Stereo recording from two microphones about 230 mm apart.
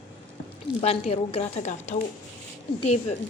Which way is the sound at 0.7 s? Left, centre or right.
Left.